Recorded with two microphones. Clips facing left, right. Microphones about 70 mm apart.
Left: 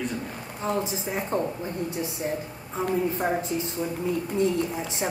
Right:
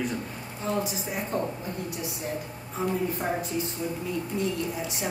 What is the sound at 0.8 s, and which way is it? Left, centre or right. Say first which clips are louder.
A woman's voice: left 2 dB; left.